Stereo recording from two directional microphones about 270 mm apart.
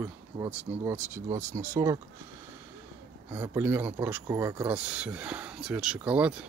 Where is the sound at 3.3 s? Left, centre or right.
Centre.